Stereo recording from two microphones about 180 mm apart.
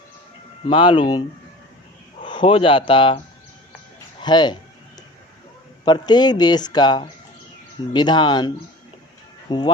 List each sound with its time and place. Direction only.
0.7 s speech: 25° left (ahead or behind)
2.2 s speech: 25° left (ahead or behind)
4.2 s speech: 25° left (ahead or behind)
5.8 s speech: 25° left (ahead or behind)